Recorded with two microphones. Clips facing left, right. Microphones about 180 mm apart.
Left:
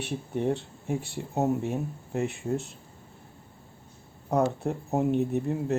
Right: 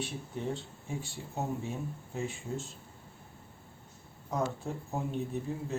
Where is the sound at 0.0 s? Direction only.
65° left (ahead or behind).